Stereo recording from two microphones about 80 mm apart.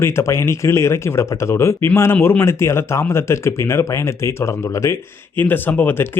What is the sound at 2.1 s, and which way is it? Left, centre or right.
Speech, left.